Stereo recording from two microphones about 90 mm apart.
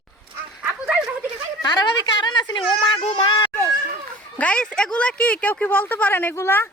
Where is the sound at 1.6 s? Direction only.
50° left (ahead or behind).